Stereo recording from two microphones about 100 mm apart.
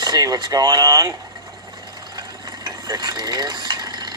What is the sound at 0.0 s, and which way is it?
Speech, 40° right (ahead or behind).